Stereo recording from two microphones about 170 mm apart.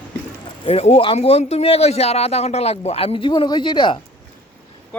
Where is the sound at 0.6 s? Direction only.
35° left (ahead or behind).